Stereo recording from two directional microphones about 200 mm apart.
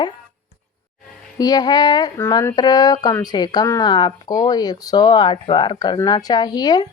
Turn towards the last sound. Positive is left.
turn(degrees=20)  # may be behind; listen again after turning